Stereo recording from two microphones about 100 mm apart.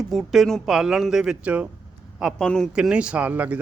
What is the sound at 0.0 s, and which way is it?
Speech, centre (ahead or behind).